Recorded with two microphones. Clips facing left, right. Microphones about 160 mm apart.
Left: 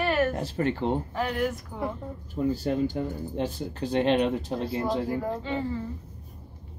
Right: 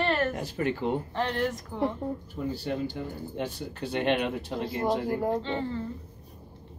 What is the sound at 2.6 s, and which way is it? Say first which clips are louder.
Speech: left 5 dB; 40° left (ahead or behind).